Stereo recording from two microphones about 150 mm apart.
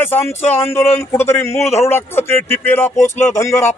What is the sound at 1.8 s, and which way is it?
Speech, 15° left (ahead or behind).